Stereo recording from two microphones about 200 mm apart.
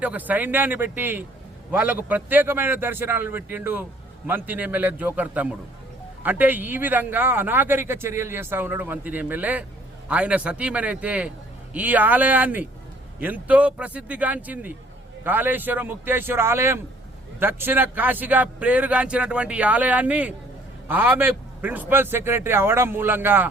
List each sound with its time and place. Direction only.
0.0 s a man's voice: 10° right (ahead or behind)